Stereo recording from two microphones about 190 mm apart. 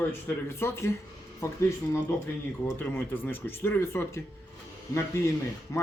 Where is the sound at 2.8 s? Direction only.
10° left (ahead or behind).